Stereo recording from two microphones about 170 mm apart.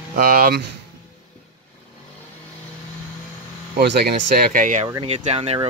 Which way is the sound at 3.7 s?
80° right.